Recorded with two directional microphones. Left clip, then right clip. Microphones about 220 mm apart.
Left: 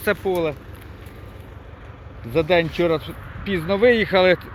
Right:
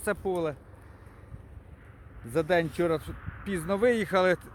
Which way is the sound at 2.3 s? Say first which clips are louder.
Left 8 dB; 30° right (ahead or behind).